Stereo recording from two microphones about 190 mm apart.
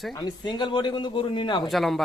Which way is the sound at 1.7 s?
Centre (ahead or behind).